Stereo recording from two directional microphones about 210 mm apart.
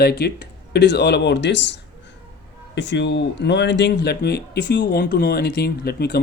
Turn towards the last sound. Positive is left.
turn(degrees=50)  # may be behind; listen again after turning